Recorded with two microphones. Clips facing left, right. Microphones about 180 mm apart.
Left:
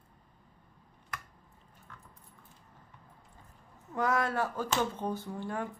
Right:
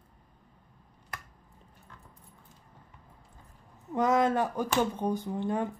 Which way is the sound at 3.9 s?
20° right (ahead or behind).